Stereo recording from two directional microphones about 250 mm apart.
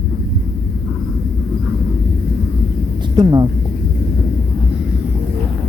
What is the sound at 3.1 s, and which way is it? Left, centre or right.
Speech, centre.